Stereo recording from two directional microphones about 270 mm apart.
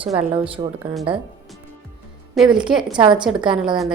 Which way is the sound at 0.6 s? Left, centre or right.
Centre.